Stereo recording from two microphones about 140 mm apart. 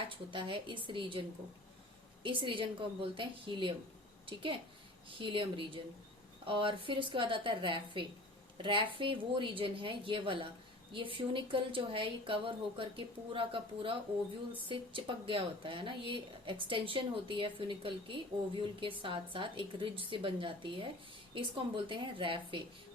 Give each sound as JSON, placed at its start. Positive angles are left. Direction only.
{"t": 0.1, "sound": "a woman's voice", "side_deg": -35}
{"t": 2.2, "sound": "a woman's voice", "side_deg": -40}
{"t": 5.0, "sound": "a woman's voice", "side_deg": -35}